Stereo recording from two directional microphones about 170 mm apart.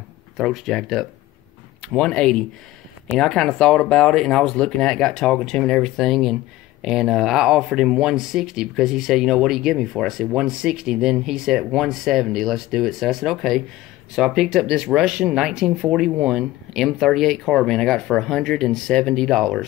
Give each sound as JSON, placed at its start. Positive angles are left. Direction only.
{"t": 0.4, "sound": "speech", "side_deg": 0}